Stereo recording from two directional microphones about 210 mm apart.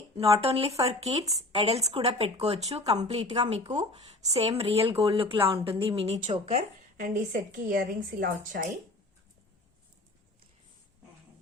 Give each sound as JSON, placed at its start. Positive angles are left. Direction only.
{"t": 0.2, "sound": "a woman's voice", "side_deg": -25}
{"t": 6.9, "sound": "a woman's voice", "side_deg": -40}